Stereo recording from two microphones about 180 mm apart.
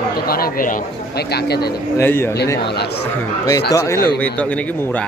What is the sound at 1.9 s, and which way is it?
Speech, 15° left (ahead or behind).